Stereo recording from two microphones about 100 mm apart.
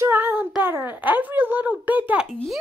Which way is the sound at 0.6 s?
20° right (ahead or behind).